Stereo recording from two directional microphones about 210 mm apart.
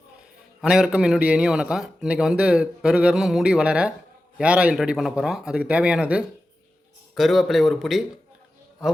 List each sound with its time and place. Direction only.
0.6 s a man's voice: 5° right (ahead or behind)